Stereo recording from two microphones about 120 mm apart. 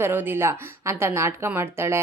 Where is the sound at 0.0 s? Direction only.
20° right (ahead or behind).